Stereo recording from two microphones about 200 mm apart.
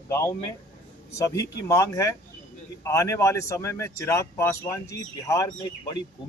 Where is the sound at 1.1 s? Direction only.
15° left (ahead or behind).